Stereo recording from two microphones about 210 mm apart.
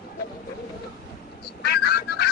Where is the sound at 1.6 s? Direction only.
50° left (ahead or behind).